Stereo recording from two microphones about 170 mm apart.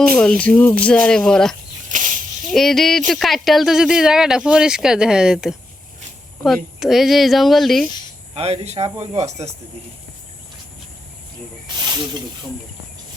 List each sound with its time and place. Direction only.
0.2 s speech: 5° left (ahead or behind)
1.9 s snake: 50° right (ahead or behind)
2.5 s speech: centre (ahead or behind)
8.4 s speech: 35° right (ahead or behind)